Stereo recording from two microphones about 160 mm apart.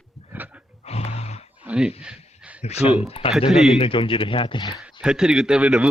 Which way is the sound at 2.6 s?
40° left (ahead or behind).